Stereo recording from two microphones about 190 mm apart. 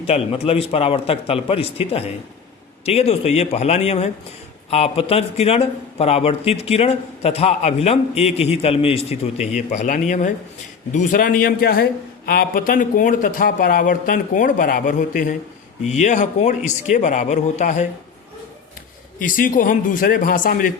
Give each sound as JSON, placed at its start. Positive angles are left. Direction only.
{"t": 0.0, "sound": "a man's voice", "side_deg": 30}
{"t": 19.2, "sound": "a man's voice", "side_deg": 45}